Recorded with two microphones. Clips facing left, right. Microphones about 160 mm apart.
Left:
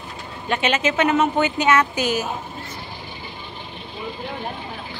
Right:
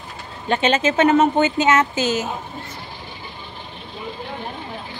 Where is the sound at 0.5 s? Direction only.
30° right (ahead or behind).